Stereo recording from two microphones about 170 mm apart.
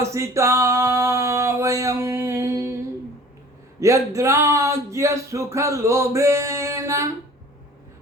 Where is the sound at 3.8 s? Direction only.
20° right (ahead or behind).